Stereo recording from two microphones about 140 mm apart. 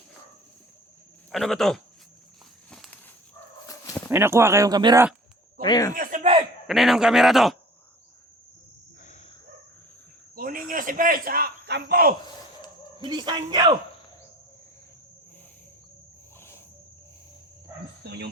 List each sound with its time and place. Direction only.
1.3 s speech: centre (ahead or behind)
2.6 s walk: 5° left (ahead or behind)
3.7 s dog: 25° left (ahead or behind)
4.1 s speech: 20° right (ahead or behind)
5.6 s speech: 30° left (ahead or behind)
5.9 s a sound: 70° right (ahead or behind)
6.7 s speech: centre (ahead or behind)
9.0 s cricket: 55° left (ahead or behind)
10.3 s a man's voice: 85° right
13.1 s a man's voice: 30° right (ahead or behind)
16.4 s cricket: 20° left (ahead or behind)